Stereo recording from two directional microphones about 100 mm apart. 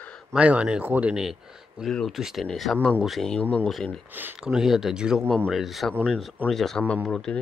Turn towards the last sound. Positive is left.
turn(degrees=5)  # may be behind; listen again after turning